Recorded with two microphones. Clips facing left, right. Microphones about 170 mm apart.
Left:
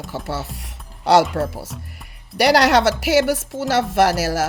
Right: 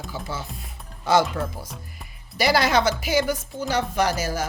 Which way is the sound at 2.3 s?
70° left (ahead or behind).